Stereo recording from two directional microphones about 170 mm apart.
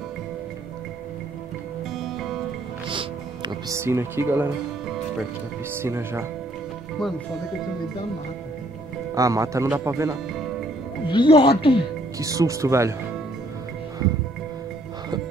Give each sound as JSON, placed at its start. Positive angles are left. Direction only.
{"t": 2.0, "sound": "music", "side_deg": 0}
{"t": 2.9, "sound": "music", "side_deg": -30}
{"t": 5.7, "sound": "speech", "side_deg": -15}
{"t": 9.1, "sound": "speech", "side_deg": -20}
{"t": 11.1, "sound": "speech", "side_deg": 30}
{"t": 12.2, "sound": "speech", "side_deg": -20}